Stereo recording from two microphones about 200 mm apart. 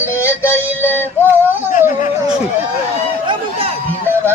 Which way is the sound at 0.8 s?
10° left (ahead or behind).